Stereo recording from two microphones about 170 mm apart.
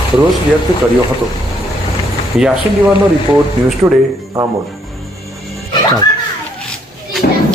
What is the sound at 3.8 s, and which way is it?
Speech, 15° right (ahead or behind).